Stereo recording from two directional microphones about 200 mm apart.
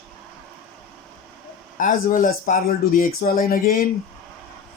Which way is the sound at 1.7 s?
40° left (ahead or behind).